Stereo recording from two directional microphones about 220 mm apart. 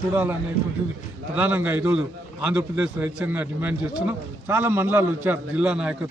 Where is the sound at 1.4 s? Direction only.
10° right (ahead or behind).